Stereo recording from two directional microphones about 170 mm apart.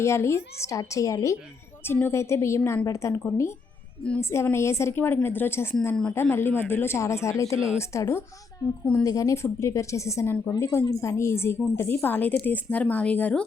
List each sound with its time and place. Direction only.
0.0 s a woman's voice: 15° left (ahead or behind)